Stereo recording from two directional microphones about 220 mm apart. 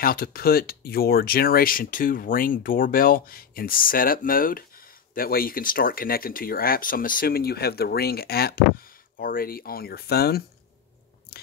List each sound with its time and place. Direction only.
0.0 s speech: 40° left (ahead or behind)